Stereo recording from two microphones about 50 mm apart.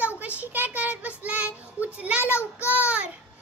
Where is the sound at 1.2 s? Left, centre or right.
Right.